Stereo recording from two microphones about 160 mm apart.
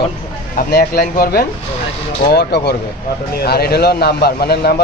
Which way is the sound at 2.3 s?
90° left.